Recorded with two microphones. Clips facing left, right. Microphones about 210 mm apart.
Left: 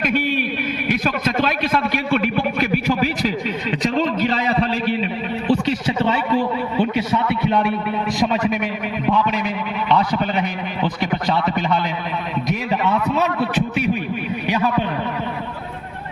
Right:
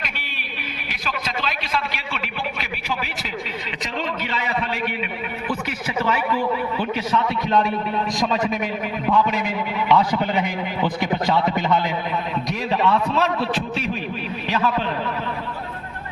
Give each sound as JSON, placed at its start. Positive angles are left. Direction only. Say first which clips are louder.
{"t": 0.9, "sound": "a man's voice", "louder": "left 9 dB", "side_deg": 50}
{"t": 4.2, "sound": "a man's voice", "louder": "left 7 dB", "side_deg": 35}
{"t": 14.4, "sound": "a man's voice", "louder": "left 2 dB", "side_deg": 15}